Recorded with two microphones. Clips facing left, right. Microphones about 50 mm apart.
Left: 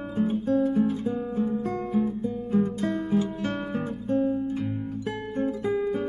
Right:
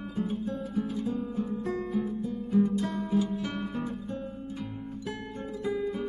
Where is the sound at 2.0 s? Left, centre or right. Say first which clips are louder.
Left 4 dB; left.